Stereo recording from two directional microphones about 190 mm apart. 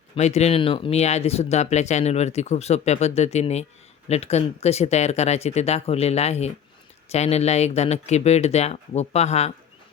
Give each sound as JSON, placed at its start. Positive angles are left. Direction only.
{"t": 0.2, "sound": "speech", "side_deg": 35}